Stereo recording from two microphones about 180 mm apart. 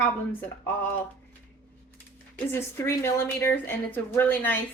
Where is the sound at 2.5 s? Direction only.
15° left (ahead or behind).